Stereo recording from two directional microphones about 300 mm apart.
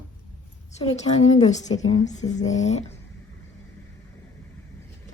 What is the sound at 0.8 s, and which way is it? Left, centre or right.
A woman's voice, left.